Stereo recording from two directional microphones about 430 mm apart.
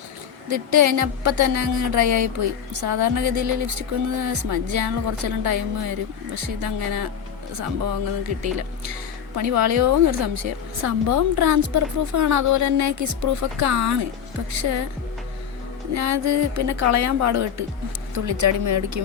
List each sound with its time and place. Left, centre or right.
0.5 s speech: right
8.5 s speech: right
15.9 s speech: right